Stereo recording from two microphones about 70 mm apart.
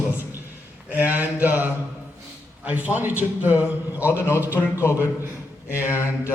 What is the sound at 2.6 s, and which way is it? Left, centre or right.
A man's voice, right.